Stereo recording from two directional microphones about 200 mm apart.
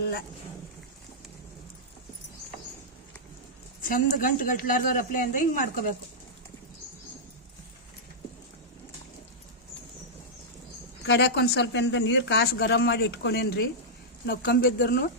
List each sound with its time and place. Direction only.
3.8 s speech: 40° left (ahead or behind)
11.0 s speech: 60° left (ahead or behind)